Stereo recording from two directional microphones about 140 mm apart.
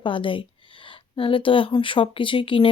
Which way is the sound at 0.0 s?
40° left (ahead or behind).